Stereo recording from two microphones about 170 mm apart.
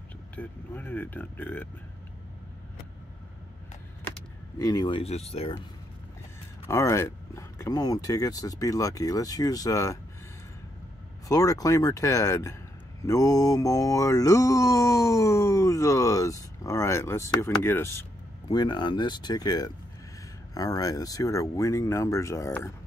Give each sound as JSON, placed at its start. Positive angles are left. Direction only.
{"t": 0.4, "sound": "mantra", "side_deg": 10}
{"t": 4.6, "sound": "speech", "side_deg": 20}
{"t": 6.7, "sound": "speech", "side_deg": 15}
{"t": 11.2, "sound": "speech", "side_deg": 20}
{"t": 13.0, "sound": "mantra", "side_deg": 20}
{"t": 18.5, "sound": "speech", "side_deg": 25}
{"t": 20.5, "sound": "mantra", "side_deg": 20}